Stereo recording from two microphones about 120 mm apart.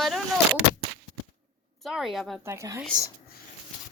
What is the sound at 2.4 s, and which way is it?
Speech, 20° right (ahead or behind).